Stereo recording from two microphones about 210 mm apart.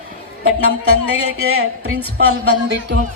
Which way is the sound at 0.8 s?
90° right.